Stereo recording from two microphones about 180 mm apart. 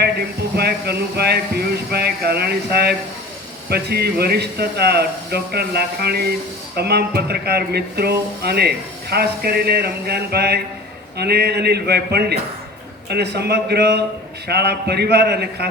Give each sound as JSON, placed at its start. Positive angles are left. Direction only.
{"t": 0.5, "sound": "speech", "side_deg": -60}